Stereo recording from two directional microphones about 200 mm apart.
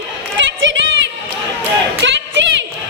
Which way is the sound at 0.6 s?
65° right (ahead or behind).